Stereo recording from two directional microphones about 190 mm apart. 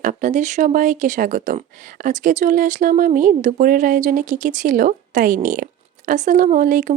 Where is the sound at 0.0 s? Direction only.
45° right (ahead or behind).